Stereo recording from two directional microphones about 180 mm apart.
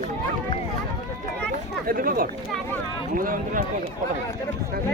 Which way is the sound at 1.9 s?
55° right (ahead or behind).